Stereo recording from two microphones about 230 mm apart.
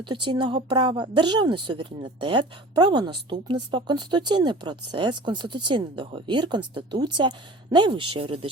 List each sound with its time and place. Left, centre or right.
0.0 s speech: right